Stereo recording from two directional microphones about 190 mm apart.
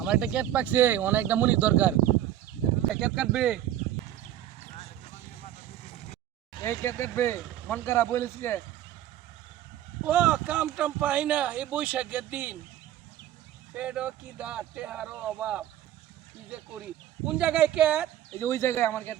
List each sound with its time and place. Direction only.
0.0 s speech: 5° right (ahead or behind)
4.7 s vehicle: 30° left (ahead or behind)
6.6 s speech: 15° left (ahead or behind)
10.1 s speech: 5° right (ahead or behind)
13.7 s speech: 5° right (ahead or behind)
18.3 s speech: 15° left (ahead or behind)